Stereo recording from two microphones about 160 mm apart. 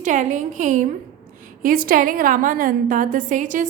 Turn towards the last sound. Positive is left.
turn(degrees=-55)  # may be behind; listen again after turning